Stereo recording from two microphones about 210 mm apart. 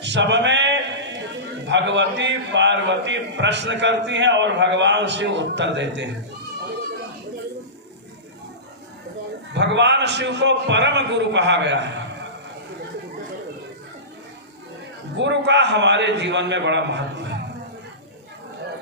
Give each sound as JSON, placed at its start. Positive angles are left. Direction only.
{"t": 0.0, "sound": "a man's voice", "side_deg": -55}
{"t": 9.6, "sound": "a man's voice", "side_deg": -55}
{"t": 15.1, "sound": "a man's voice", "side_deg": -55}